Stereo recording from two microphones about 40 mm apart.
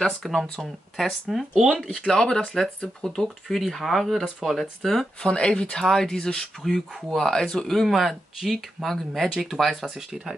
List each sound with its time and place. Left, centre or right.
0.0 s speech: centre
1.9 s speech: centre
5.2 s speech: left; by 10.3 s centre